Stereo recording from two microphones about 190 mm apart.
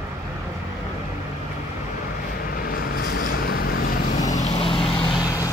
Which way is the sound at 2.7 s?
50° left (ahead or behind).